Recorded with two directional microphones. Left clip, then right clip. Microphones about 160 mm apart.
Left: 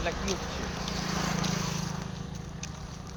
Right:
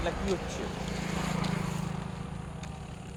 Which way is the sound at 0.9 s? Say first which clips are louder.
Left 3 dB; 30° left (ahead or behind).